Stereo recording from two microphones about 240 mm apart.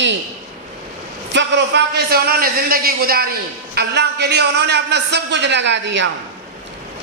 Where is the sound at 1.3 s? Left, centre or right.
Right.